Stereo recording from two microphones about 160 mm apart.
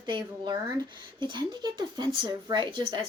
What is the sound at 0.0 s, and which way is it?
A woman's voice, 25° right (ahead or behind).